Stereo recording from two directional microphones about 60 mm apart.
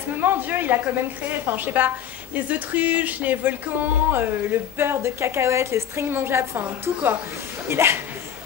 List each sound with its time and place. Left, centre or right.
0.2 s speech: right